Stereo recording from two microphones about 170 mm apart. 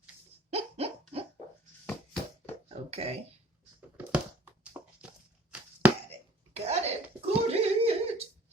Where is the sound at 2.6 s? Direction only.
35° right (ahead or behind).